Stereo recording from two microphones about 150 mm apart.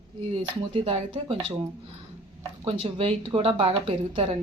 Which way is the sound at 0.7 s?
35° right (ahead or behind).